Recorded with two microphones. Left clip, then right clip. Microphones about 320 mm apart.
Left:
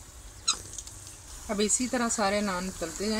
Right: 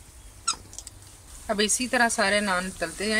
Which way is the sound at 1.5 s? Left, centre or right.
Right.